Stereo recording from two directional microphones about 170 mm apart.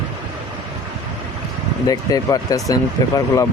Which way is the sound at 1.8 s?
20° left (ahead or behind).